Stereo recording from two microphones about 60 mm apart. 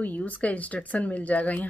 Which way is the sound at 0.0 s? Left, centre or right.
Left.